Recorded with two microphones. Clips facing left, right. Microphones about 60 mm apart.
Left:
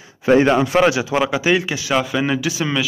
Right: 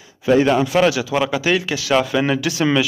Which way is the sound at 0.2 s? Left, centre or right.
Left.